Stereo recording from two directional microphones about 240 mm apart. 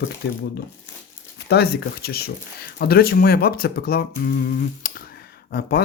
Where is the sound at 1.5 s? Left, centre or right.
Left.